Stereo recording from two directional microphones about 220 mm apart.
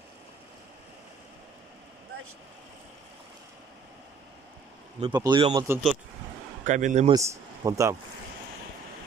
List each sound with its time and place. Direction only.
5.1 s speech: 20° right (ahead or behind)
6.6 s speech: 35° right (ahead or behind)
7.1 s speech: 15° right (ahead or behind)